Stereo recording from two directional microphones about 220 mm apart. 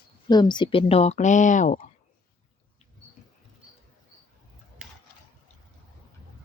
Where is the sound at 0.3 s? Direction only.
20° left (ahead or behind); by 1.8 s 35° left (ahead or behind).